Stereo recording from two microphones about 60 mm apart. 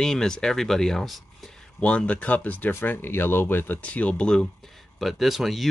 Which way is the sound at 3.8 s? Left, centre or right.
Left.